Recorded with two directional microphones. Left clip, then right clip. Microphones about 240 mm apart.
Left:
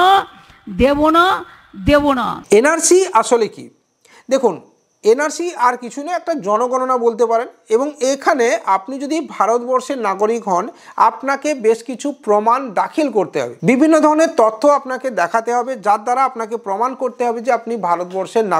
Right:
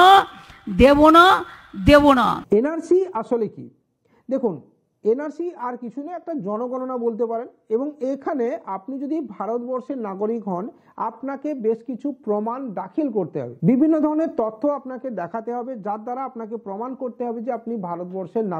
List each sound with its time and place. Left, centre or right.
0.0 s a woman's voice: centre
5.0 s speech: centre
6.5 s a woman's voice: centre
9.5 s a woman's voice: centre
9.8 s a woman's voice: centre